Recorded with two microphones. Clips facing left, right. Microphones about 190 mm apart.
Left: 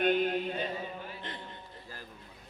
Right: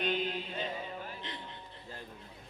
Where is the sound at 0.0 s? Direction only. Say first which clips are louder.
Left 6 dB; 50° left (ahead or behind).